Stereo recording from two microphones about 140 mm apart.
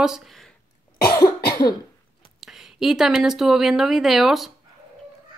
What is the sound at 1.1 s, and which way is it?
Cough, 25° left (ahead or behind).